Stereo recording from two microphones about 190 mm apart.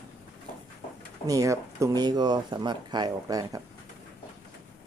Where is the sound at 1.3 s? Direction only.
15° right (ahead or behind).